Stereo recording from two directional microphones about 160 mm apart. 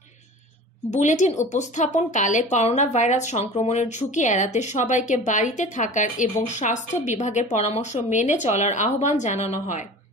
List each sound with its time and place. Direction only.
0.8 s speech: 50° left (ahead or behind)